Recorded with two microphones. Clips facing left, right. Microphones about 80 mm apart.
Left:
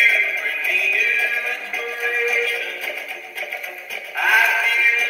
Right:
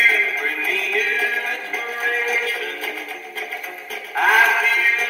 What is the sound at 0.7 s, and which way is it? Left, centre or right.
Synthetic singing, right.